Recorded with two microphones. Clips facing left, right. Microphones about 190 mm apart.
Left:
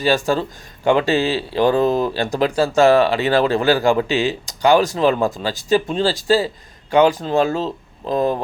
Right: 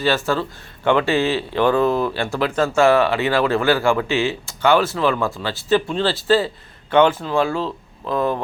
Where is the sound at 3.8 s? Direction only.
20° left (ahead or behind).